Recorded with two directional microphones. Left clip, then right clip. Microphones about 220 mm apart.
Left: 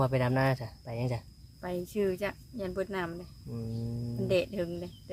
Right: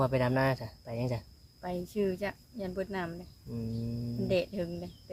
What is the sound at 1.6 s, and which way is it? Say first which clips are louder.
Speech: left 1 dB; 10° left (ahead or behind).